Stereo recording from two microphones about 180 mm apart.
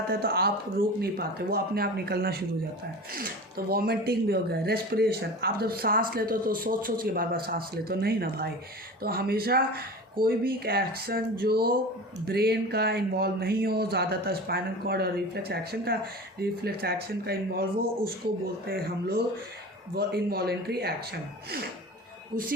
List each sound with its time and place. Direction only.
0.1 s speech: 60° right (ahead or behind)
3.7 s speech: 60° right (ahead or behind)